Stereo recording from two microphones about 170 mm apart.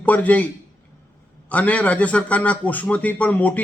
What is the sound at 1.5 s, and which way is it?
A man's voice, 10° left (ahead or behind).